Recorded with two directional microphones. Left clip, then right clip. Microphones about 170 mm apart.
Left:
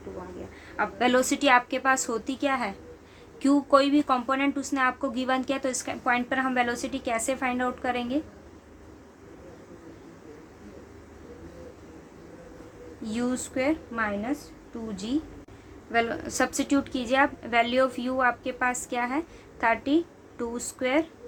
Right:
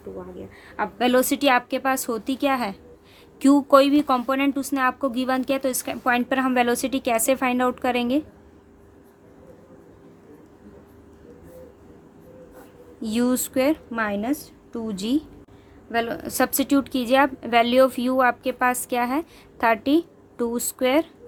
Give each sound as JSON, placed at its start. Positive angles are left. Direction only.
{"t": 0.8, "sound": "a woman's voice", "side_deg": -60}
{"t": 13.0, "sound": "a woman's voice", "side_deg": -65}
{"t": 14.9, "sound": "a woman's voice", "side_deg": -65}
{"t": 15.9, "sound": "a woman's voice", "side_deg": -55}